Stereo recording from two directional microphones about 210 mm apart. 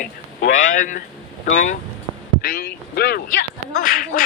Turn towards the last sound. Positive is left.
turn(degrees=40)  # may be behind; listen again after turning